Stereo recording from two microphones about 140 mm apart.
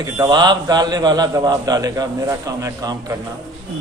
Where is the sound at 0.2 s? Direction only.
30° right (ahead or behind).